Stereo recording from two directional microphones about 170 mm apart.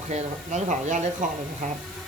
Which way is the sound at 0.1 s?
45° right (ahead or behind).